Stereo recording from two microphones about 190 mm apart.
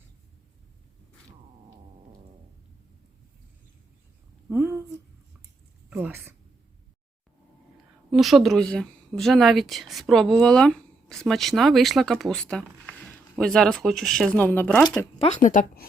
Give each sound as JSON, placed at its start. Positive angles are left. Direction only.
{"t": 4.4, "sound": "a sound", "side_deg": -10}
{"t": 5.9, "sound": "speech", "side_deg": -10}
{"t": 8.1, "sound": "a woman's voice", "side_deg": 0}
{"t": 15.2, "sound": "speech", "side_deg": 40}